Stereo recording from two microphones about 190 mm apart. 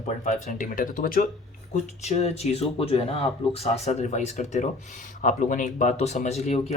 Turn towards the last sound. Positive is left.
turn(degrees=35)  # may be behind; listen again after turning